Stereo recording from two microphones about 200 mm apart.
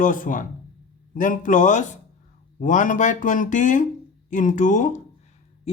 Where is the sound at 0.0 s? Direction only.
40° left (ahead or behind).